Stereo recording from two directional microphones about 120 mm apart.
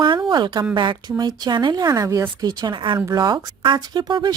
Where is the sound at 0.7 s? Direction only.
40° right (ahead or behind).